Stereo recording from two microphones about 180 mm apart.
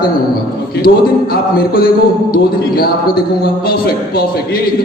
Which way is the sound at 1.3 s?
55° left (ahead or behind).